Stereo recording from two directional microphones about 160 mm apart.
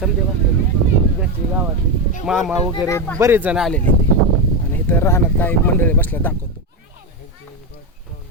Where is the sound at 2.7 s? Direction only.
20° left (ahead or behind).